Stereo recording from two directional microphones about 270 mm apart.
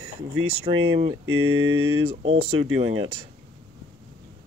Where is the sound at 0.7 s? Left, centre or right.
Right.